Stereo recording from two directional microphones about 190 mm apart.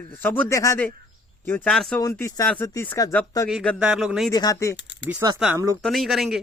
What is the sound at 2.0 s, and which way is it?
A man's voice, 15° left (ahead or behind).